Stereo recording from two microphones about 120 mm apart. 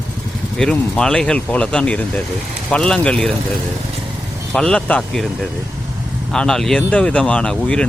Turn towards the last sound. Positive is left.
turn(degrees=5)  # may be behind; listen again after turning